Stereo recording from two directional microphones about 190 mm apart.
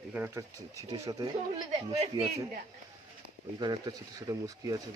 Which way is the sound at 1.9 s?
35° right (ahead or behind).